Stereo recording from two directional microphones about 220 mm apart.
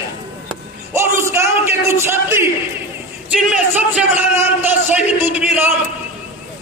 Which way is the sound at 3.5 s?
5° right (ahead or behind).